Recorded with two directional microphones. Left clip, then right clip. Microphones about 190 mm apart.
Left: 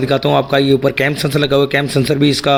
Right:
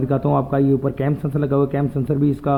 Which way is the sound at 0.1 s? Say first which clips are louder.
Left 7 dB; 20° left (ahead or behind).